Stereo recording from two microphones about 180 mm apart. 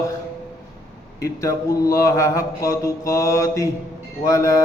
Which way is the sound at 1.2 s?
15° left (ahead or behind).